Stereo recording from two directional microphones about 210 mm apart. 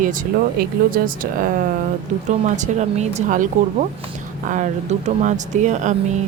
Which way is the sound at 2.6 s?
35° right (ahead or behind).